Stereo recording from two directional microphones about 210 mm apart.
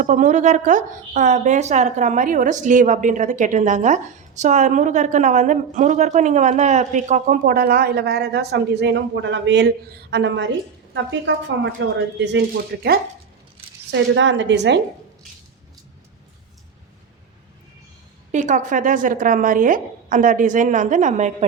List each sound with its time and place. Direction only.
0.0 s a woman's voice: 35° right (ahead or behind); by 12.4 s 55° right (ahead or behind)
13.9 s speech: 60° right (ahead or behind)
18.3 s a woman's voice: 35° right (ahead or behind)